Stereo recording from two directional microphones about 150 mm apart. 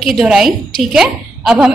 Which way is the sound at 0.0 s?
Centre (ahead or behind).